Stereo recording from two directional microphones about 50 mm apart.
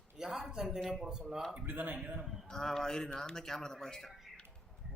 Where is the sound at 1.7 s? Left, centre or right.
Right.